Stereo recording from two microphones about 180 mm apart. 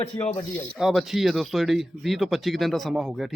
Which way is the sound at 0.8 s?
Centre (ahead or behind).